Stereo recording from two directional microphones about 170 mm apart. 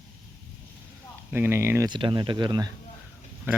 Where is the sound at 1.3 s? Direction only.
15° right (ahead or behind).